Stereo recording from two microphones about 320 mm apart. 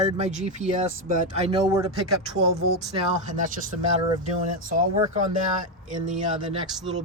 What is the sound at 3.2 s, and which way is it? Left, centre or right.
Speech, right.